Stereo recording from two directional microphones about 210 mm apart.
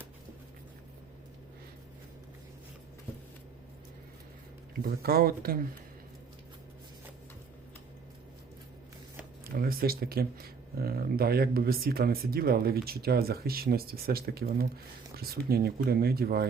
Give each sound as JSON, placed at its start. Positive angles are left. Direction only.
{"t": 4.7, "sound": "speech", "side_deg": -45}
{"t": 9.6, "sound": "speech", "side_deg": -45}